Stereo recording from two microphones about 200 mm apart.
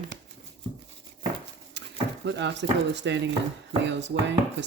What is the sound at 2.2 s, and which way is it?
Speech, 60° right (ahead or behind).